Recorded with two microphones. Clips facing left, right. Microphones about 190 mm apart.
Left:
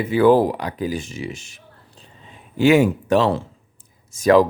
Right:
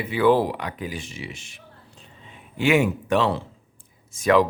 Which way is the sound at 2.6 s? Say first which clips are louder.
Left 5 dB; 40° left (ahead or behind).